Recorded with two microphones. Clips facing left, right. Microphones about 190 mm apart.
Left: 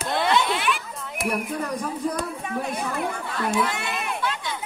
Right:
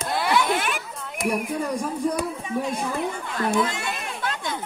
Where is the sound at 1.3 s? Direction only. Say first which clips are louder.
Right 2 dB; 10° right (ahead or behind).